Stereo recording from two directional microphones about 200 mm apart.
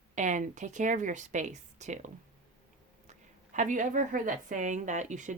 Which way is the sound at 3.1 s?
40° right (ahead or behind).